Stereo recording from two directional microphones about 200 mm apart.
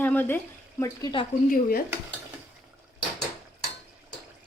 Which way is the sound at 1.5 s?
45° left (ahead or behind).